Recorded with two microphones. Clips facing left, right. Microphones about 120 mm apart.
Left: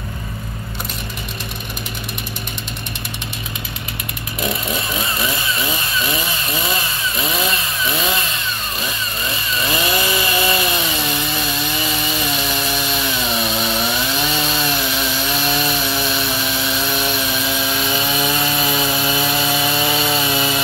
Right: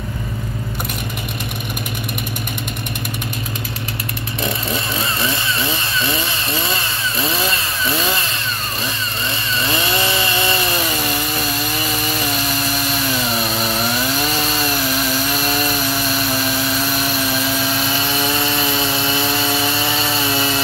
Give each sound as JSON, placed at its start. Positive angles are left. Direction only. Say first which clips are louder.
{"t": 5.2, "sound": "chainsaw", "louder": "right 1 dB", "side_deg": -30}
{"t": 7.8, "sound": "chainsaw", "louder": "right 1 dB", "side_deg": 0}
{"t": 9.6, "sound": "chainsaw", "louder": "even", "side_deg": -30}
{"t": 12.9, "sound": "chainsaw", "louder": "right 1 dB", "side_deg": 0}
{"t": 16.9, "sound": "chainsaw", "louder": "right 1 dB", "side_deg": -5}